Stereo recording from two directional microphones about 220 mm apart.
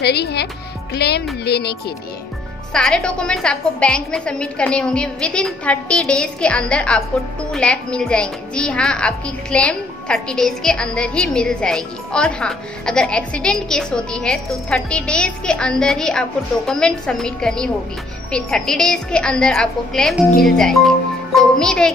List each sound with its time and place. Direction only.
0.0 s speech: 50° left (ahead or behind)
2.7 s a woman's voice: 5° left (ahead or behind)